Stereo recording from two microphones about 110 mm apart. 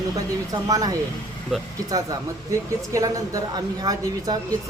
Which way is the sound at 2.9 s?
30° right (ahead or behind).